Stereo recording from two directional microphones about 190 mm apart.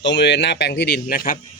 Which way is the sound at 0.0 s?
65° left (ahead or behind).